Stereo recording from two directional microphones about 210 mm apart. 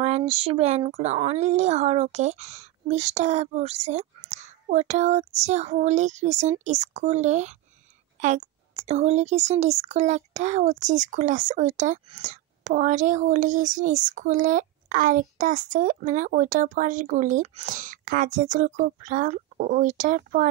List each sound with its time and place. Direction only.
0.0 s a woman's voice: 30° right (ahead or behind)